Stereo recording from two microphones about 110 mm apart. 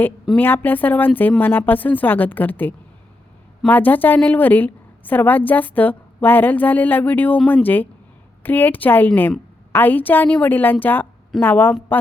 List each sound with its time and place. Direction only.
0.3 s a woman's voice: 20° left (ahead or behind)